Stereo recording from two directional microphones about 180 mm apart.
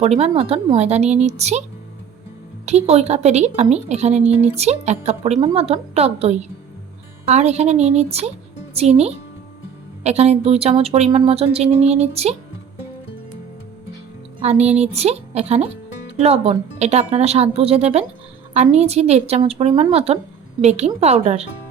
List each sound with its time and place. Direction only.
0.0 s speech: 35° right (ahead or behind)
2.6 s speech: 35° right (ahead or behind)
14.6 s speech: 35° right (ahead or behind)